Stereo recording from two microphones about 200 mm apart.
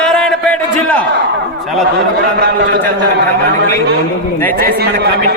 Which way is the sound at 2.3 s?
60° right (ahead or behind).